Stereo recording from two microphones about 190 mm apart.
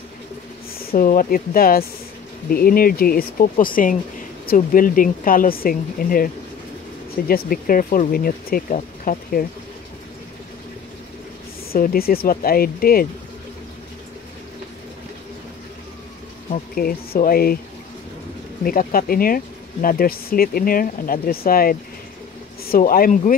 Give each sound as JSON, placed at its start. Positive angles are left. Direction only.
{"t": 0.9, "sound": "speech", "side_deg": 50}
{"t": 11.7, "sound": "speech", "side_deg": 50}
{"t": 16.4, "sound": "speech", "side_deg": 45}
{"t": 18.6, "sound": "speech", "side_deg": 50}